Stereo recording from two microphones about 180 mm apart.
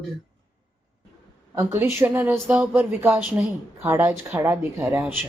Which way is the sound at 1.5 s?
15° right (ahead or behind).